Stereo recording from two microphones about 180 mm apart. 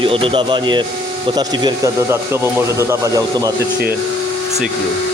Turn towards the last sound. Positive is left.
turn(degrees=-15)  # may be behind; listen again after turning